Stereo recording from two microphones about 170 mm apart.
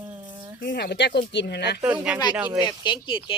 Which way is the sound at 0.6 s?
70° left (ahead or behind).